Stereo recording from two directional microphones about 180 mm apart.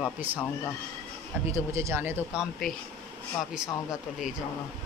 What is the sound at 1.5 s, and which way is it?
Speech, 15° right (ahead or behind).